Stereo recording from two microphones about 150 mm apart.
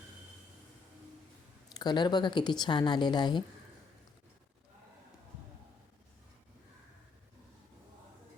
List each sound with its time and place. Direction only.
1.7 s a woman's voice: 30° left (ahead or behind)